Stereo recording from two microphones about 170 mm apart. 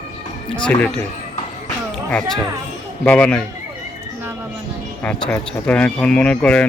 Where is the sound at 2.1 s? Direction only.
5° left (ahead or behind).